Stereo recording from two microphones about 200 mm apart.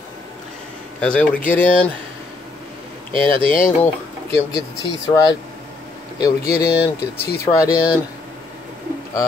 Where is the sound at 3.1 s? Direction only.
25° right (ahead or behind).